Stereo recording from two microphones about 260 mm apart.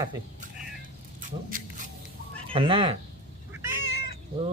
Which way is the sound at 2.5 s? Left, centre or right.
Right.